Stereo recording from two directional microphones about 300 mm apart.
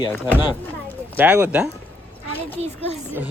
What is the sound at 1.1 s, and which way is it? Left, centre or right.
Speech, centre.